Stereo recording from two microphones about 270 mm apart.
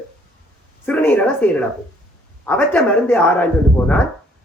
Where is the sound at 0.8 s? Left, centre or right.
Centre.